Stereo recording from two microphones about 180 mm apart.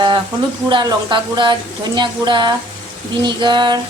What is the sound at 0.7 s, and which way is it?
Speech, 25° right (ahead or behind).